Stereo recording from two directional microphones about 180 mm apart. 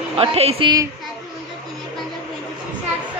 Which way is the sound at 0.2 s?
30° right (ahead or behind).